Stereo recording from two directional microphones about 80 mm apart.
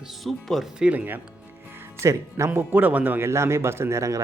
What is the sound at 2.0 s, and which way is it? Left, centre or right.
Speech, right.